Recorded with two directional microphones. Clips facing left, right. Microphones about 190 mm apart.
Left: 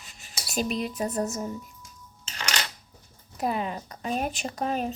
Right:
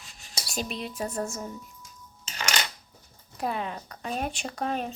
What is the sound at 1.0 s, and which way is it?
Speech, 20° left (ahead or behind).